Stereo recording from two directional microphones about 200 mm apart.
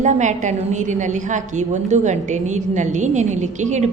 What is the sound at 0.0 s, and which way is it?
A woman's voice, 35° right (ahead or behind).